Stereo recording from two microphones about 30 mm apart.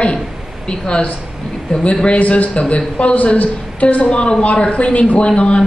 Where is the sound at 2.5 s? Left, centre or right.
Left.